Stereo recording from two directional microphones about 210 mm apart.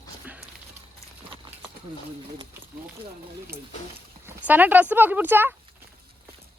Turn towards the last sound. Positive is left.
turn(degrees=-10)  # may be behind; listen again after turning